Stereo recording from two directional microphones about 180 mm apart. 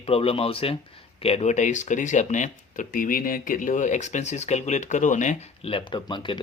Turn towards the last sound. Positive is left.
turn(degrees=25)  # may be behind; listen again after turning